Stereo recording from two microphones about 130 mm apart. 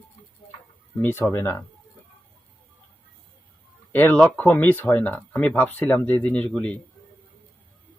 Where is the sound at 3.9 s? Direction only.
15° left (ahead or behind).